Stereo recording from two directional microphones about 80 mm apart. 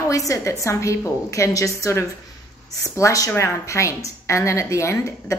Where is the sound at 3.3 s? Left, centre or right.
Left.